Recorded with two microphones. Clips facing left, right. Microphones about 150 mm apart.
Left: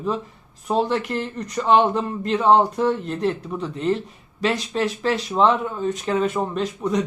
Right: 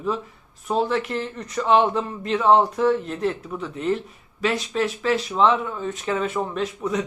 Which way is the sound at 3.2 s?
35° left (ahead or behind).